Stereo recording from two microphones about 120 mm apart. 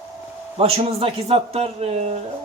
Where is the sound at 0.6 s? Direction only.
55° right (ahead or behind).